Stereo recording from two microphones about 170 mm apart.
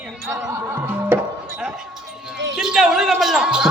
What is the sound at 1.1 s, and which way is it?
Music, 10° right (ahead or behind).